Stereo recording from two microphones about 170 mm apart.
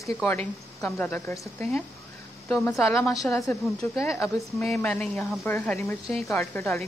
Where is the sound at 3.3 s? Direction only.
15° left (ahead or behind).